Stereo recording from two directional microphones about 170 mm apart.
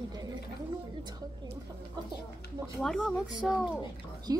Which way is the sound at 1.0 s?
25° right (ahead or behind).